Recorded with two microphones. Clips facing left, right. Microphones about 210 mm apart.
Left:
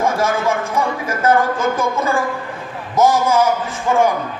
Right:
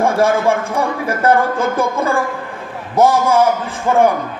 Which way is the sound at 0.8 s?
60° right (ahead or behind).